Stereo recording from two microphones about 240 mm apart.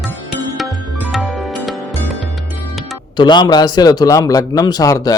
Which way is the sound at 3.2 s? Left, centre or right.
Centre.